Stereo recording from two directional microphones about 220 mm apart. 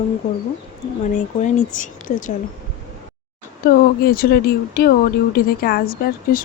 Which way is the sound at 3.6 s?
40° left (ahead or behind).